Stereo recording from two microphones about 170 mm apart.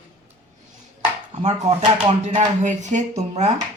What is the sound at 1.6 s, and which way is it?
Speech, 40° right (ahead or behind).